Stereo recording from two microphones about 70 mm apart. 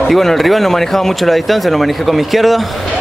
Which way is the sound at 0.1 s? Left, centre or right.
Centre.